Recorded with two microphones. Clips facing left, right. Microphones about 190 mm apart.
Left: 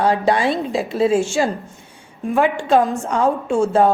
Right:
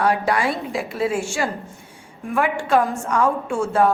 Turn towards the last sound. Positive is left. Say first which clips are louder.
# left 4 dB
turn(degrees=20)  # may be behind; listen again after turning